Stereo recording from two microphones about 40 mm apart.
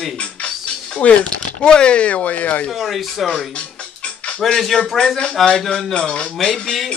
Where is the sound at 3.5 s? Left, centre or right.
Left.